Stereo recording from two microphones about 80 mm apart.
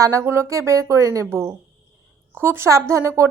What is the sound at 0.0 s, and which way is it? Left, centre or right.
A woman's voice, right.